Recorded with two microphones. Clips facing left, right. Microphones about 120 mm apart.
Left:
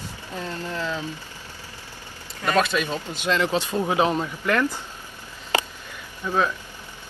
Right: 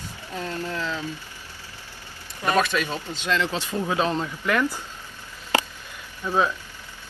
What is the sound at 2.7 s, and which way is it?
Speech, 15° left (ahead or behind).